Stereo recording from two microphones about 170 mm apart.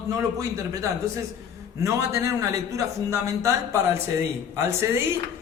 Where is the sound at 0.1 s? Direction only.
20° right (ahead or behind).